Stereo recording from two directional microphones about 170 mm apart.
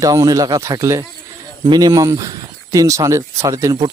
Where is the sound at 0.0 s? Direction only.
20° right (ahead or behind).